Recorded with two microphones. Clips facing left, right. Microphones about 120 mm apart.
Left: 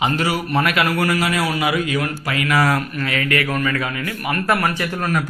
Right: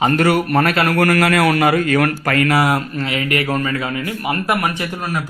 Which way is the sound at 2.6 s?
25° right (ahead or behind).